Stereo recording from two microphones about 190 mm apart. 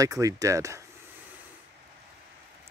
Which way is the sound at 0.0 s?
20° right (ahead or behind).